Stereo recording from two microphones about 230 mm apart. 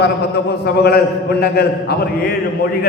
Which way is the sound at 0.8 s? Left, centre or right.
Left.